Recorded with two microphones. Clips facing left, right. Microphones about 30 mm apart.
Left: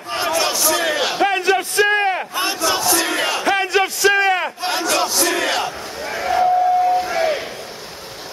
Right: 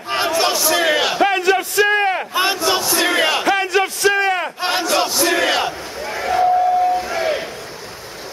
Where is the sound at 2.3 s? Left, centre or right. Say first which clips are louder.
Right 2 dB; right.